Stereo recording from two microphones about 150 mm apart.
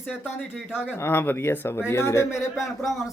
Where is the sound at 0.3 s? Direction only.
5° right (ahead or behind).